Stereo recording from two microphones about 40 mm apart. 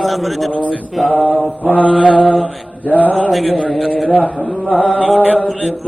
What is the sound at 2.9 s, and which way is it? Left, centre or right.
Mantra, left.